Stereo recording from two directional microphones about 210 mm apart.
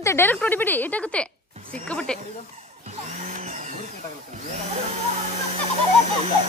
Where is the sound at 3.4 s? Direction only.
35° right (ahead or behind).